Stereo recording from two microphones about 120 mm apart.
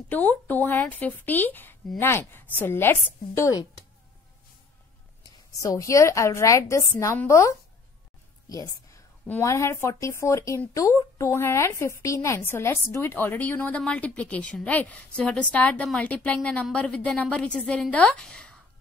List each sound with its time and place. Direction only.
0.1 s a woman's voice: 15° left (ahead or behind); by 3.8 s 30° left (ahead or behind)
5.2 s a woman's voice: 30° left (ahead or behind); by 18.6 s 10° left (ahead or behind)